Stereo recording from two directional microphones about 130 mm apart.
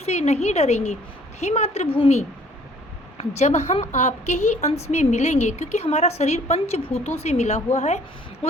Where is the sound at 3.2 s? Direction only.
55° left (ahead or behind).